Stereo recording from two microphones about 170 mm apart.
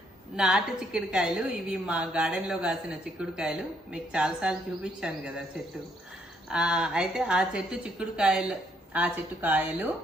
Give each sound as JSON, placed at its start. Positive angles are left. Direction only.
{"t": 0.3, "sound": "a woman's voice", "side_deg": -5}
{"t": 6.5, "sound": "a woman's voice", "side_deg": -5}